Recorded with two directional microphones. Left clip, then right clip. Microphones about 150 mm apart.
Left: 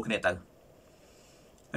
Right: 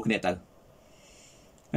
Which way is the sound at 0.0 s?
25° right (ahead or behind).